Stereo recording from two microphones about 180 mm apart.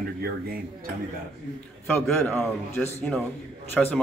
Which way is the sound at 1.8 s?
10° left (ahead or behind).